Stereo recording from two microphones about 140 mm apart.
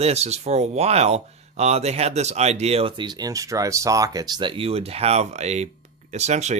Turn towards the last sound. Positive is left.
turn(degrees=-55)  # may be behind; listen again after turning